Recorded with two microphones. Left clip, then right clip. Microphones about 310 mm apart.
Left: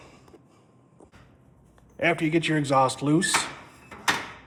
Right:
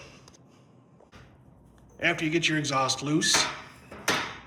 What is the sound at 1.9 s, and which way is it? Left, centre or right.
Rub, centre.